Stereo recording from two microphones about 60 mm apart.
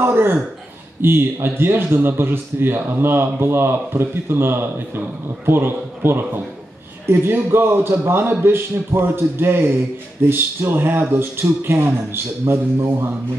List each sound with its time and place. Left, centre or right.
0.0 s speech: right